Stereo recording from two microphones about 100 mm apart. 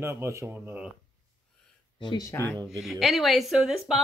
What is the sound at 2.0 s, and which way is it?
Speech, 50° left (ahead or behind).